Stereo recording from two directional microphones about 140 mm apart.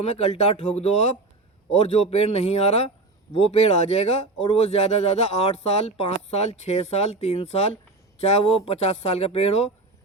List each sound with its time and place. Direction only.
0.0 s speech: 55° left (ahead or behind)